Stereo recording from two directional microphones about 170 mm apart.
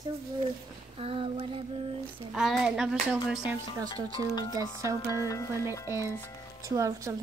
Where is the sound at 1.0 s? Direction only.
35° right (ahead or behind).